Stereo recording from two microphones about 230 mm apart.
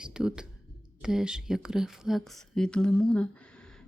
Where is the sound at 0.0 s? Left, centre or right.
Centre.